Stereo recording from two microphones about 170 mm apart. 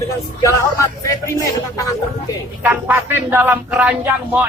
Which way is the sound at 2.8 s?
10° right (ahead or behind).